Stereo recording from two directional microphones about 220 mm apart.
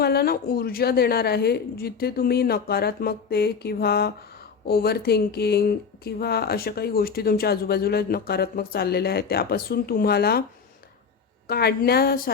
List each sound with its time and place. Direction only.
0.0 s speech: 45° left (ahead or behind)
11.4 s speech: 45° left (ahead or behind)